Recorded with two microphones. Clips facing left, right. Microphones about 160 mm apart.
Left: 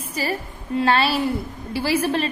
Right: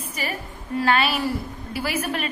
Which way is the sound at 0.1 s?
35° left (ahead or behind).